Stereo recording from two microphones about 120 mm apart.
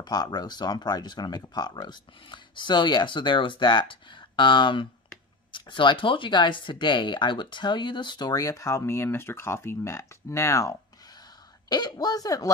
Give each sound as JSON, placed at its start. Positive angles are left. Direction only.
{"t": 0.0, "sound": "speech", "side_deg": 35}